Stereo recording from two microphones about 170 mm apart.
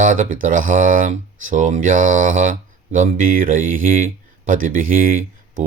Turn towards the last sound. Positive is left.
turn(degrees=-55)  # may be behind; listen again after turning